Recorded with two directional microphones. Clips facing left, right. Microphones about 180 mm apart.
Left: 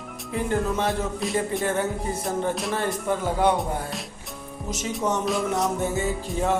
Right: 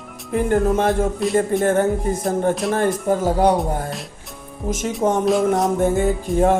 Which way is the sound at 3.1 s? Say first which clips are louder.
Right 4 dB; 40° right (ahead or behind).